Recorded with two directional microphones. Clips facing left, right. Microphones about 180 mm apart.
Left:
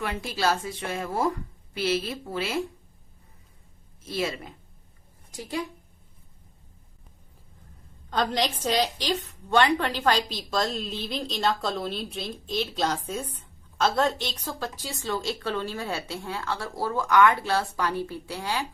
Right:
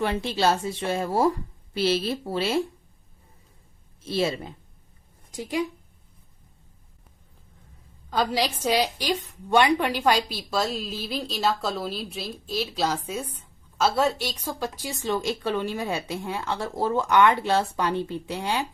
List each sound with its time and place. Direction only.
0.0 s speech: 30° right (ahead or behind)
4.0 s speech: 30° right (ahead or behind)
5.3 s speech: 15° right (ahead or behind)
8.1 s a woman's voice: 5° right (ahead or behind)